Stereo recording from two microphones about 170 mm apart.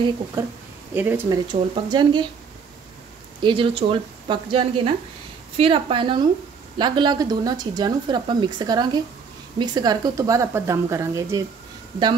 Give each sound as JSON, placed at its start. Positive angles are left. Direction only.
{"t": 0.4, "sound": "speech", "side_deg": -15}
{"t": 1.5, "sound": "speech", "side_deg": -25}
{"t": 3.4, "sound": "a woman's voice", "side_deg": -30}